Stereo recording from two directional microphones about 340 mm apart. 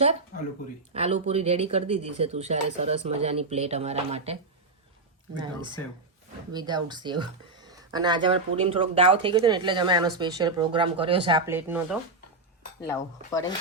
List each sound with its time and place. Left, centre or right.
0.9 s speech: centre
12.9 s cutlery: centre